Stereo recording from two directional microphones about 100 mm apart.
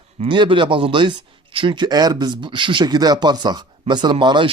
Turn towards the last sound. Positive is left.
turn(degrees=-50)  # may be behind; listen again after turning